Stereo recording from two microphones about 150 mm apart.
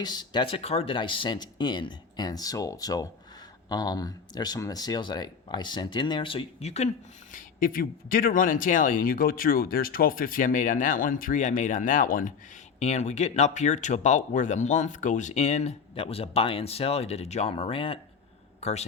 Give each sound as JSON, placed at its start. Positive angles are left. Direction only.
{"t": 0.0, "sound": "speech", "side_deg": 30}
{"t": 7.3, "sound": "speech", "side_deg": 70}
{"t": 12.8, "sound": "speech", "side_deg": 50}
{"t": 16.0, "sound": "a man's voice", "side_deg": 40}